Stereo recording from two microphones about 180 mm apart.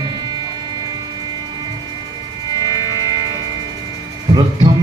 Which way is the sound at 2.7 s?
20° left (ahead or behind).